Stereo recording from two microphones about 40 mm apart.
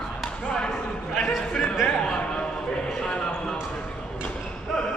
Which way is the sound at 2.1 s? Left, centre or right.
Left.